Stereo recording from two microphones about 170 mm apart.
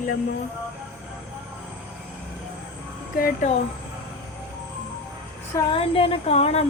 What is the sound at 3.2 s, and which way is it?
Speech, 55° left (ahead or behind).